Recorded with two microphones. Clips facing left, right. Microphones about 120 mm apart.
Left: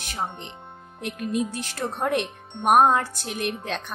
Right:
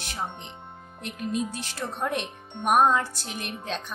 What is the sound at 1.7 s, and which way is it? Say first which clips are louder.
A woman's voice: left 5 dB; 55° left (ahead or behind).